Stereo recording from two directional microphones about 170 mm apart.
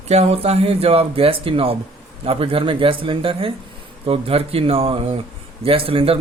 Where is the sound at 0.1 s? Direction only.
40° right (ahead or behind).